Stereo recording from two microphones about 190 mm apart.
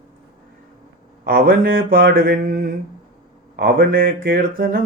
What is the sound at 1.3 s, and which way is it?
Mantra, 50° right (ahead or behind).